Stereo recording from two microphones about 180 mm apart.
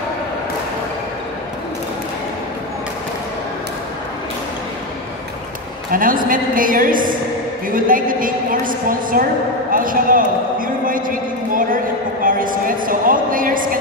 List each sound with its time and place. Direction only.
5.9 s a woman's voice: 50° right (ahead or behind)